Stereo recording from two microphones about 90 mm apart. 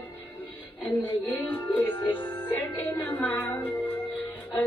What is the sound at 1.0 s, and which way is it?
Music, 20° left (ahead or behind).